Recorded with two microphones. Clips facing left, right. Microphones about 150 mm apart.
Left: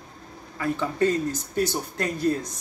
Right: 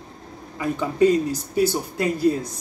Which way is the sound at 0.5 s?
15° right (ahead or behind).